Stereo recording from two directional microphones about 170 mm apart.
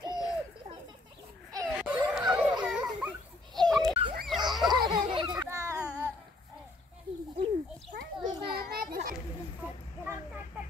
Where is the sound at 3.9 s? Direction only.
30° right (ahead or behind).